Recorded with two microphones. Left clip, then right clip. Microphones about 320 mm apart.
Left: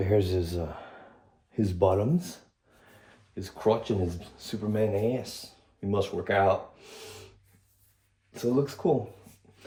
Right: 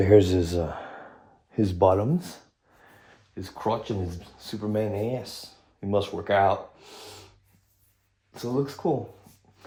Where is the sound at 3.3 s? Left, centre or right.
Centre.